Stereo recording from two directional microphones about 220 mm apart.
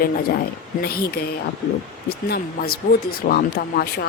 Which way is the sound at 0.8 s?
45° left (ahead or behind).